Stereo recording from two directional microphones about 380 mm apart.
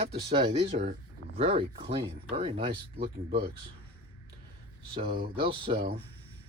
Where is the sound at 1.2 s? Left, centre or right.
Left.